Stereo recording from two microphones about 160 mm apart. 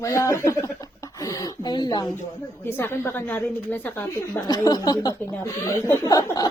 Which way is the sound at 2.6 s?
15° left (ahead or behind).